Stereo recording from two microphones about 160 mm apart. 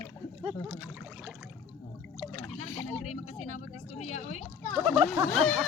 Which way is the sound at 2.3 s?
15° left (ahead or behind).